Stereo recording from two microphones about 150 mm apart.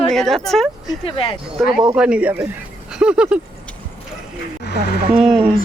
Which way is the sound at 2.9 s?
5° right (ahead or behind).